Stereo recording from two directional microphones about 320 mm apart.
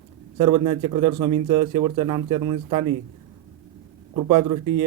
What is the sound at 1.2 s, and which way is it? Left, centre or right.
Speech, centre.